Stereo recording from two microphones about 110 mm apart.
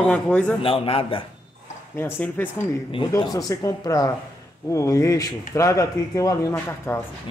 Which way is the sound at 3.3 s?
35° left (ahead or behind).